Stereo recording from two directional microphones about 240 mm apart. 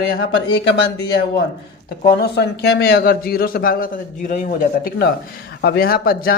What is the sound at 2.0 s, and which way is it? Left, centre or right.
A man's voice, left.